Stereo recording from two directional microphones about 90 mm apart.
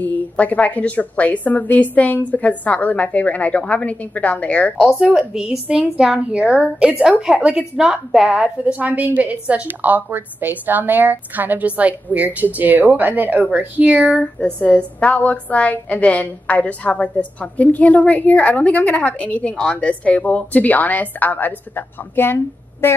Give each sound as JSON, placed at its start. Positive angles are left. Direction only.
{"t": 0.0, "sound": "a woman's voice", "side_deg": 15}
{"t": 5.3, "sound": "a woman's voice", "side_deg": -5}
{"t": 14.2, "sound": "a woman's voice", "side_deg": 10}